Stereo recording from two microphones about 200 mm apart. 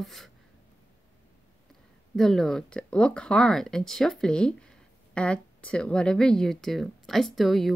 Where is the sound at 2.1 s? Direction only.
Centre (ahead or behind).